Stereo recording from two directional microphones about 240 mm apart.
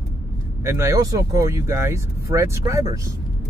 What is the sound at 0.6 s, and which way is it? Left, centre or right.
Speech, centre.